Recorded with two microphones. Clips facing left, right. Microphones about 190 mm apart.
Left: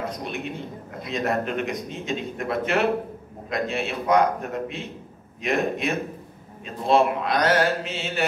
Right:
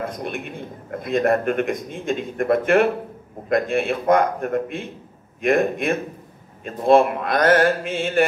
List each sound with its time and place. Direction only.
0.0 s a man's voice: 50° right (ahead or behind)